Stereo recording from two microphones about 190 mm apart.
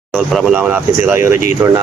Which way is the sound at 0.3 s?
5° right (ahead or behind).